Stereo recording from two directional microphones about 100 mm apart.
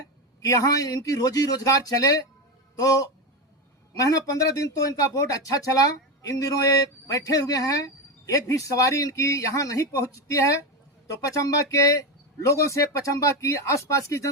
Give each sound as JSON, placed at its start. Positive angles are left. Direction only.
{"t": 0.4, "sound": "speech", "side_deg": 35}
{"t": 3.9, "sound": "speech", "side_deg": 35}